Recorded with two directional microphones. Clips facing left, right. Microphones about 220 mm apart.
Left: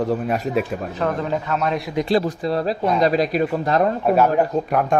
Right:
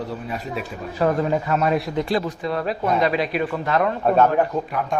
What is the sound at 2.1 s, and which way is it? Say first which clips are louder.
Speech: left 4 dB; 35° left (ahead or behind).